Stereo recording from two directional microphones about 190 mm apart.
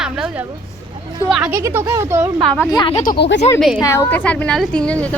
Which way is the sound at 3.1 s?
65° left (ahead or behind).